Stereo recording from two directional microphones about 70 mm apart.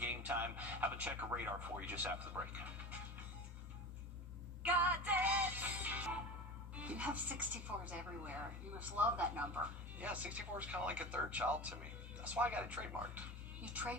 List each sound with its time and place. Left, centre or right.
0.0 s a sound: right
1.6 s speech: right
4.6 s music: right
6.7 s a woman's voice: right